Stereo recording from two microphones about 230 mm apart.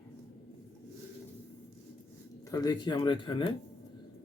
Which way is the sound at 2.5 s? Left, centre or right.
Centre.